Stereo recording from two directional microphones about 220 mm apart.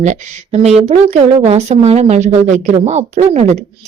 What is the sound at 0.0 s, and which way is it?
A woman's voice, 35° right (ahead or behind).